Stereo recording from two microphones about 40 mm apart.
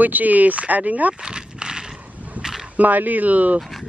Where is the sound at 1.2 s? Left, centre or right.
Right.